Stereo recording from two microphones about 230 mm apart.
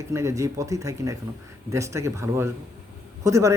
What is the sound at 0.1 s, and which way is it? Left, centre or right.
Speech, centre.